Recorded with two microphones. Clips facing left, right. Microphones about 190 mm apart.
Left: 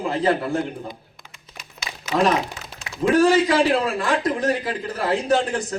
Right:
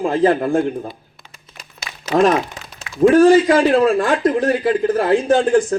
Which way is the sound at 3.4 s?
45° right (ahead or behind).